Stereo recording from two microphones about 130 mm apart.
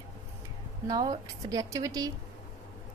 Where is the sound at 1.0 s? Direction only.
30° right (ahead or behind).